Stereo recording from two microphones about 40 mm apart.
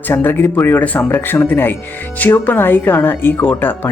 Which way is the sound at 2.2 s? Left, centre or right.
Left.